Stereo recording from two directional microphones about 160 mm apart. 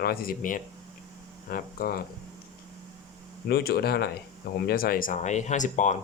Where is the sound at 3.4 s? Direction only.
80° left.